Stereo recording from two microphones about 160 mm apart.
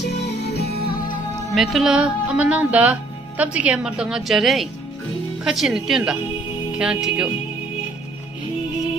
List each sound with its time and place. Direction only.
0.0 s music: 90° left
0.7 s music: 65° left (ahead or behind)
1.5 s speech: centre (ahead or behind)